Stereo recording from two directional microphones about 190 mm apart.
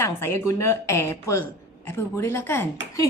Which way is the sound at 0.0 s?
15° left (ahead or behind).